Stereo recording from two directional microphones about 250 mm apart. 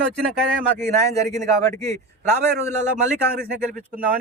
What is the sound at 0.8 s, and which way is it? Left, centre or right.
Speech, centre.